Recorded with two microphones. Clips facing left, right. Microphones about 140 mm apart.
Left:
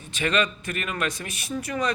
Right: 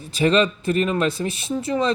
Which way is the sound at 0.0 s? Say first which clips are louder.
Right 7 dB; 35° right (ahead or behind).